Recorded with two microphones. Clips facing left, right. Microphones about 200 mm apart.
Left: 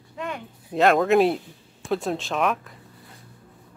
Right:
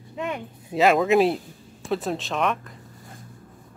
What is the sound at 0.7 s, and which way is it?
Speech, centre (ahead or behind).